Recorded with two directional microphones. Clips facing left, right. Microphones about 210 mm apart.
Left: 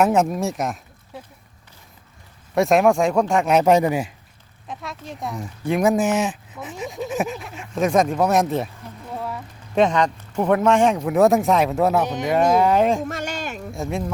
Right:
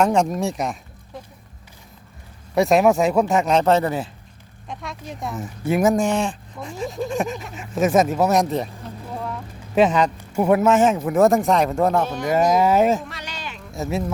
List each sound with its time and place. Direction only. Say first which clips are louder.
0.0 s speech: even; 5° left (ahead or behind)
2.6 s speech: even; centre (ahead or behind)
3.4 s speech: left 2 dB; 10° left (ahead or behind)
4.7 s speech: even; centre (ahead or behind)
13.0 s a sound: left 8 dB; 45° left (ahead or behind)
13.7 s speech: right 2 dB; 5° right (ahead or behind)